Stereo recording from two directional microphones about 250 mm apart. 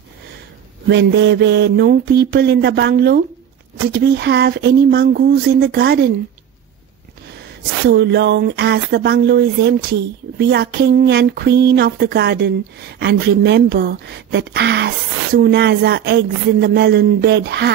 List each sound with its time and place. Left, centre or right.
0.8 s speech: right
7.9 s speech: right